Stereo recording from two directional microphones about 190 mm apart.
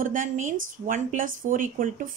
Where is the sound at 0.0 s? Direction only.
45° right (ahead or behind).